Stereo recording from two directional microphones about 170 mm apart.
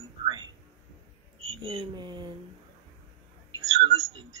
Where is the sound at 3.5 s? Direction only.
25° right (ahead or behind).